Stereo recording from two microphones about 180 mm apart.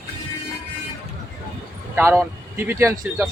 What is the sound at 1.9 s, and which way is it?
Speech, 15° right (ahead or behind).